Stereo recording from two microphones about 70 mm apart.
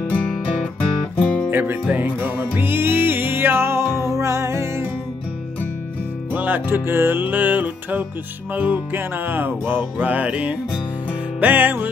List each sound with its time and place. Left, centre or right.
0.1 s music: centre
1.5 s music: right
6.3 s music: right